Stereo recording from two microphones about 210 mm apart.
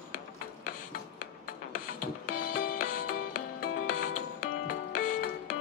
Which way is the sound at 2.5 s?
40° left (ahead or behind).